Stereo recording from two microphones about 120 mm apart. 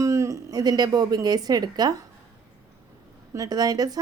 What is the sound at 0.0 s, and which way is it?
A woman's voice, 25° right (ahead or behind).